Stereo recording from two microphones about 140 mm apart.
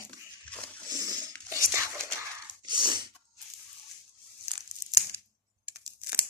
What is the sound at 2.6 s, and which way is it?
Sneeze, 35° right (ahead or behind).